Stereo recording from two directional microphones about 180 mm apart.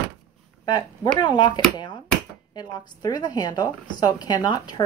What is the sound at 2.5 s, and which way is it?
A woman's voice, 20° left (ahead or behind).